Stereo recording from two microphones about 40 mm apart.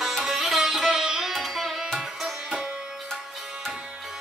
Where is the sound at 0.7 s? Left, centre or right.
Centre.